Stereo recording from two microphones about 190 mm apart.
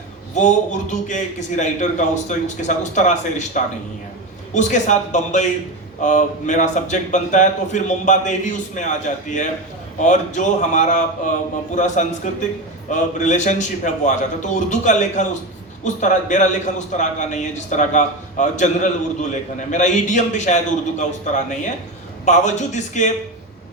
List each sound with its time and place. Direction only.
0.3 s a man's voice: 40° left (ahead or behind)